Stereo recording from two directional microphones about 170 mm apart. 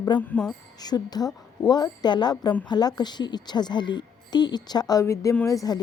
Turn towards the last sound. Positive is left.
turn(degrees=20)  # may be behind; listen again after turning